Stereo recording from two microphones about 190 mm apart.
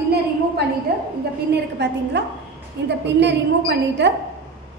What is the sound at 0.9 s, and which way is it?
Speech, 55° right (ahead or behind).